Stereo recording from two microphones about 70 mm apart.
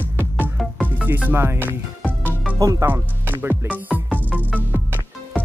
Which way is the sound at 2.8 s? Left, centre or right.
Right.